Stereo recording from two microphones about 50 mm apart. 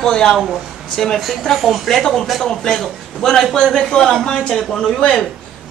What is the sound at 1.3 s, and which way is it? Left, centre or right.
A woman's voice, centre.